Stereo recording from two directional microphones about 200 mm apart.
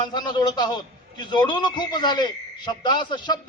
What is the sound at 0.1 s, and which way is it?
A man's voice, 20° left (ahead or behind).